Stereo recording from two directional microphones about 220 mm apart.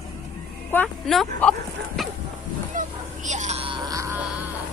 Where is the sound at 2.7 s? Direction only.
35° right (ahead or behind).